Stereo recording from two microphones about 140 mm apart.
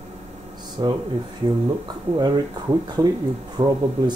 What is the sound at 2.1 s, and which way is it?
Speech, 30° right (ahead or behind).